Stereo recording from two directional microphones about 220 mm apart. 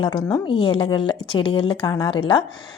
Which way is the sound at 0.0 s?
20° left (ahead or behind).